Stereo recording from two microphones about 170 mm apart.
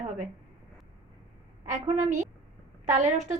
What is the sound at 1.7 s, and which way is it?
A woman's voice, 45° right (ahead or behind).